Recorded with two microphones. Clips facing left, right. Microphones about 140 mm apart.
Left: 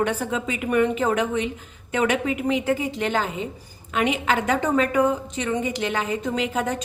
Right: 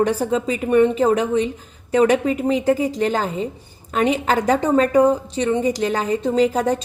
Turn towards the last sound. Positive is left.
turn(degrees=-35)  # may be behind; listen again after turning